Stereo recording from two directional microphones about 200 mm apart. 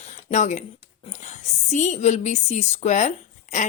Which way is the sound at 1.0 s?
35° left (ahead or behind).